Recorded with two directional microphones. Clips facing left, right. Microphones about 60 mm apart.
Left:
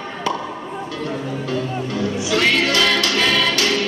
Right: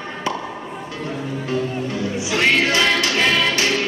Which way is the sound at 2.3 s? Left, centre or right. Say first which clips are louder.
Even; right.